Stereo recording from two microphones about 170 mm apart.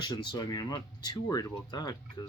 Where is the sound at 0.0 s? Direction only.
25° left (ahead or behind).